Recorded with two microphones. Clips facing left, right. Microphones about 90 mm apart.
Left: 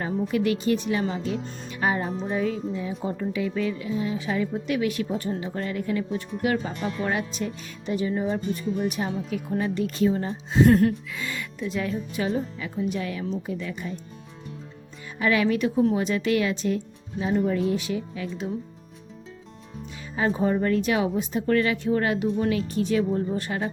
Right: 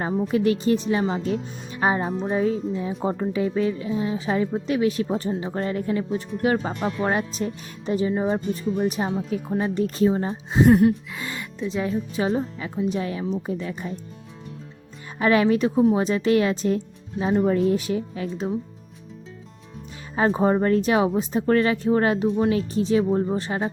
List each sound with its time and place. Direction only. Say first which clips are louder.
0.0 s a woman's voice: right 3 dB; 30° right (ahead or behind)
10.7 s gasp: right 4 dB; 15° right (ahead or behind)
11.1 s a woman's voice: even; 40° right (ahead or behind)
11.7 s a woman's voice: right 3 dB; 25° right (ahead or behind)
15.2 s a woman's voice: right 4 dB; 35° right (ahead or behind)
20.1 s a woman's voice: right 4 dB; 35° right (ahead or behind)